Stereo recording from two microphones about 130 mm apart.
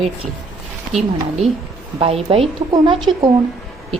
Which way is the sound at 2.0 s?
50° right (ahead or behind).